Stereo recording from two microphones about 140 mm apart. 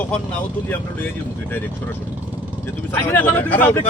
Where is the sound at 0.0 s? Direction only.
10° left (ahead or behind).